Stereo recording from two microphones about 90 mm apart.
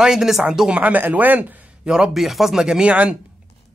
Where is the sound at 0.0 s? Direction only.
5° right (ahead or behind).